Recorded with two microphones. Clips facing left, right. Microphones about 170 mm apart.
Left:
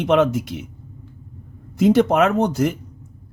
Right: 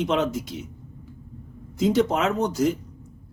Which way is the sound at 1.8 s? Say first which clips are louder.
Left 6 dB; 60° left (ahead or behind).